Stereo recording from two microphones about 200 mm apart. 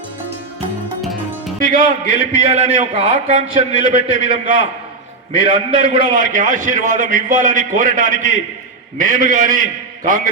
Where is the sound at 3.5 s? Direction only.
80° left.